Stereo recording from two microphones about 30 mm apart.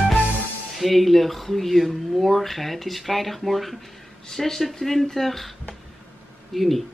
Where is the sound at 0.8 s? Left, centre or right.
Centre.